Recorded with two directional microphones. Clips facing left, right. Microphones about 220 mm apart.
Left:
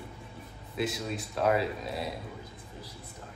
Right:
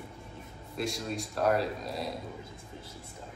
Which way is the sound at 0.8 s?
Centre (ahead or behind).